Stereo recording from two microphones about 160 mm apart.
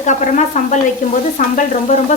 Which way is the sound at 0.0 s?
50° left (ahead or behind).